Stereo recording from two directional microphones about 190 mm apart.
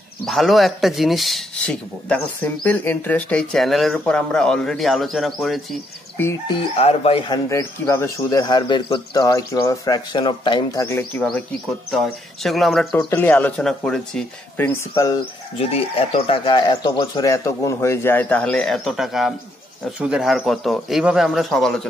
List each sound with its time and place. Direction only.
0.2 s speech: centre (ahead or behind)
6.4 s speech: 30° left (ahead or behind)
7.4 s speech: 15° left (ahead or behind)
15.5 s speech: 30° left (ahead or behind); by 21.8 s centre (ahead or behind)